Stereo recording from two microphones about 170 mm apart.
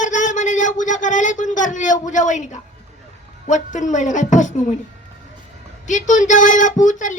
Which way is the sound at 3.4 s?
45° left (ahead or behind).